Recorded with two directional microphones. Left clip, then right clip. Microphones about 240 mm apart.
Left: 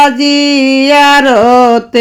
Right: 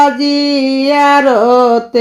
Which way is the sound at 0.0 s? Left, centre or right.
Left.